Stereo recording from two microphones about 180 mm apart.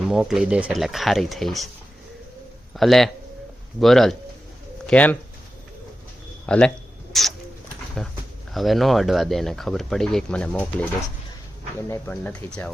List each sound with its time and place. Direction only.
0.1 s speech: 5° right (ahead or behind)
2.7 s speech: centre (ahead or behind)
6.4 s a sound: 5° left (ahead or behind)
8.0 s speech: 5° left (ahead or behind)